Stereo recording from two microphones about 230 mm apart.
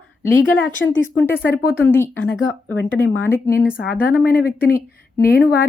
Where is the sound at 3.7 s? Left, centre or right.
Left.